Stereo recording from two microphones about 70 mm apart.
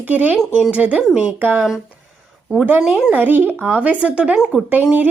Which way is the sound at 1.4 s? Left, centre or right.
Right.